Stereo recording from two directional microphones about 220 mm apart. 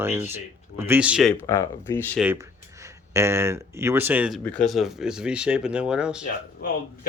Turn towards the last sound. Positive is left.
turn(degrees=40)  # may be behind; listen again after turning